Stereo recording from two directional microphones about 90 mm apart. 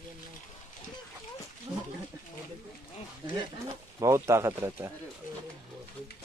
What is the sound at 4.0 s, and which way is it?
Speech, 30° right (ahead or behind).